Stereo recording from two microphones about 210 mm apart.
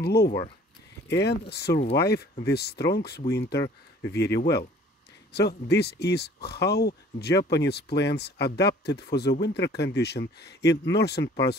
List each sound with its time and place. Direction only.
0.0 s speech: 50° left (ahead or behind)